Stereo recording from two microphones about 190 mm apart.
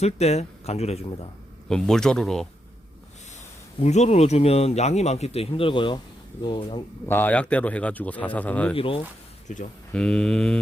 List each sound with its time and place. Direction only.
0.0 s speech: 35° left (ahead or behind)
1.7 s speech: 5° left (ahead or behind)
3.8 s speech: 35° left (ahead or behind)
7.0 s a man's voice: 10° left (ahead or behind)
8.7 s speech: 30° left (ahead or behind)
9.5 s speech: 40° left (ahead or behind)
9.9 s speech: 5° left (ahead or behind)